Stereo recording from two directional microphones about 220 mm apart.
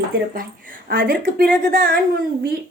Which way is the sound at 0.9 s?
40° right (ahead or behind).